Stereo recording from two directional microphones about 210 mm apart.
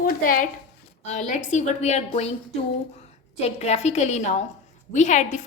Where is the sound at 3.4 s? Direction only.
30° left (ahead or behind).